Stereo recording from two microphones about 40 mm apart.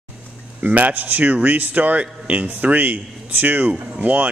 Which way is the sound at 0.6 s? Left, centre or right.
Right.